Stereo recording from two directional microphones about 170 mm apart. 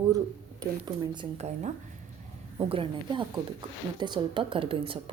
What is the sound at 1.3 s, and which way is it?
Speech, 40° right (ahead or behind).